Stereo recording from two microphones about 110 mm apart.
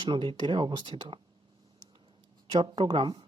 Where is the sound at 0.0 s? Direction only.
45° right (ahead or behind).